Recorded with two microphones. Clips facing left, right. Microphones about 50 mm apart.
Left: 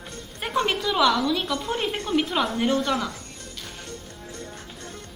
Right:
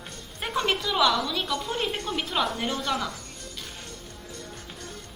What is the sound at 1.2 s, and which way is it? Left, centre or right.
A woman's voice, centre.